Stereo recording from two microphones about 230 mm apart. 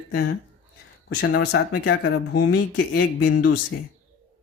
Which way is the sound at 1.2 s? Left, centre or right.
Left.